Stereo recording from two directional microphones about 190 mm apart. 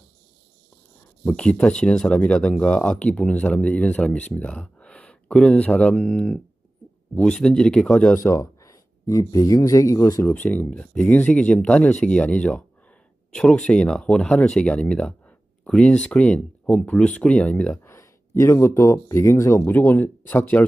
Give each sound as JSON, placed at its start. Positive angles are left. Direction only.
{"t": 1.2, "sound": "a man's voice", "side_deg": 5}